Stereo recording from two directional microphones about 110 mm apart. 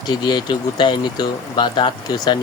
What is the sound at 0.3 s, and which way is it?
Speech, 40° left (ahead or behind).